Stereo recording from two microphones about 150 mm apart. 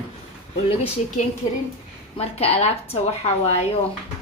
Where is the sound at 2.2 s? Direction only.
40° left (ahead or behind).